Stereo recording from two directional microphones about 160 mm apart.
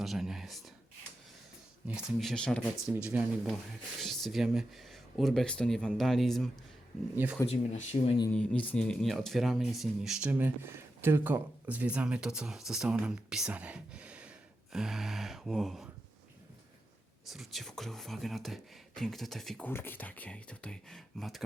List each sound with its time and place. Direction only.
0.0 s speech: centre (ahead or behind)
1.9 s speech: centre (ahead or behind)
2.9 s speech: 10° right (ahead or behind)
4.0 s speech: centre (ahead or behind)
7.4 s speech: 40° left (ahead or behind)
8.3 s speech: 10° left (ahead or behind)
17.2 s speech: centre (ahead or behind)